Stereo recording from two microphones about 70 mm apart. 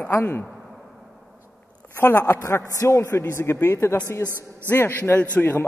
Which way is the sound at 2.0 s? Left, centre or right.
Left.